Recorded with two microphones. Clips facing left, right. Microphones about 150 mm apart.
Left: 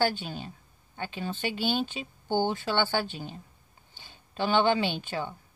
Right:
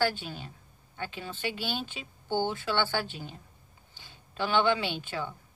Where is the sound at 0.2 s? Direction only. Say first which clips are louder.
Left 3 dB; 25° left (ahead or behind).